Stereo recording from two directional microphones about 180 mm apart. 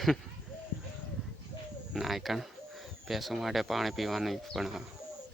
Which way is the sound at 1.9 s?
Centre (ahead or behind).